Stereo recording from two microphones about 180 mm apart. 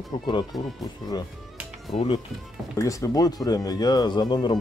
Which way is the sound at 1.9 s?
35° left (ahead or behind).